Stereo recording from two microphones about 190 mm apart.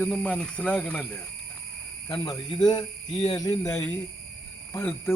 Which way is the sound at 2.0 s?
20° left (ahead or behind).